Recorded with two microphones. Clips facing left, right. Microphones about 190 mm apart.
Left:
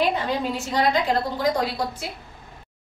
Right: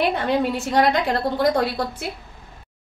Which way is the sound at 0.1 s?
65° right (ahead or behind).